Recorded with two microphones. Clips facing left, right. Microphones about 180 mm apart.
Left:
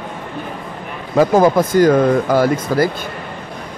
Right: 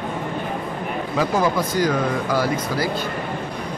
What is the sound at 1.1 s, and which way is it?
Speech, 50° left (ahead or behind).